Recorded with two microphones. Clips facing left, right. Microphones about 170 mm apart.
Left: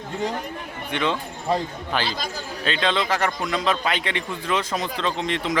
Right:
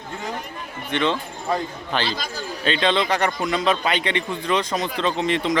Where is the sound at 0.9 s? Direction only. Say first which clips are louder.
Right 2 dB; 10° left (ahead or behind).